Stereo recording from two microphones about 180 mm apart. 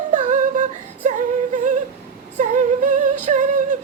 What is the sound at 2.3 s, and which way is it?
Female singing, 45° right (ahead or behind).